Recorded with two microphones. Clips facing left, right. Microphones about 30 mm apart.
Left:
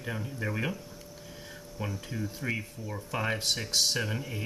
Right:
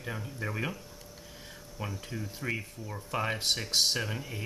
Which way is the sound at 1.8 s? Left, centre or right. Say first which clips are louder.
Left 2 dB; centre.